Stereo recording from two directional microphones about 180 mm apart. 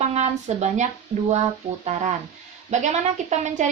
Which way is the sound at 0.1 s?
40° right (ahead or behind).